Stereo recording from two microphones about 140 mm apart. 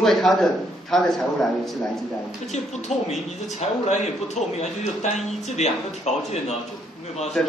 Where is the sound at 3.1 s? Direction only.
55° left (ahead or behind).